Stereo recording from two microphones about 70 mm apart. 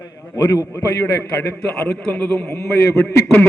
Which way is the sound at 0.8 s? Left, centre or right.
Left.